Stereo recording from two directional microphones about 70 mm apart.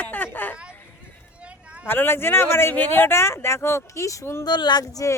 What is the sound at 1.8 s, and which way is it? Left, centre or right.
Speech, left.